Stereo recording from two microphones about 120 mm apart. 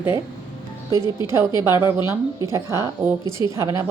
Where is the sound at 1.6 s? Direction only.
25° right (ahead or behind).